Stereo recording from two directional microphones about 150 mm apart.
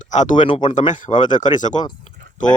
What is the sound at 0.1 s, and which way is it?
Speech, 55° left (ahead or behind).